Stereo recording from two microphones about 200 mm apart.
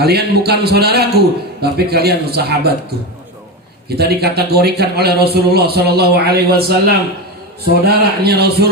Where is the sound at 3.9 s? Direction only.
55° right (ahead or behind).